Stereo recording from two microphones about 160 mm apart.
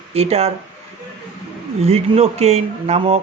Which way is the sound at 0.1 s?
40° right (ahead or behind).